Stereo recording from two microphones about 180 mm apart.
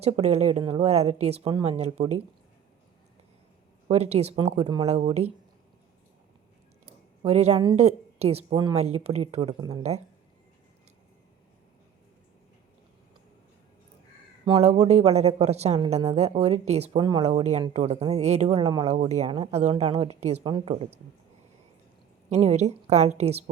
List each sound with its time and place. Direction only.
0.0 s speech: 35° right (ahead or behind)
3.8 s speech: 35° right (ahead or behind)
6.8 s a sound: 35° right (ahead or behind)
7.8 s a woman's voice: 35° right (ahead or behind)
9.6 s speech: 20° right (ahead or behind)
14.6 s speech: 40° right (ahead or behind)
18.4 s speech: 25° right (ahead or behind)
18.9 s speech: 40° right (ahead or behind)
22.3 s speech: 40° right (ahead or behind)